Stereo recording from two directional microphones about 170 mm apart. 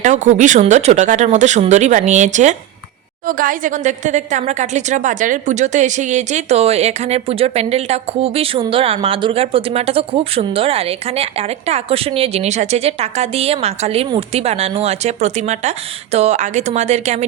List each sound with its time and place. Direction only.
0.0 s a woman's voice: 45° right (ahead or behind)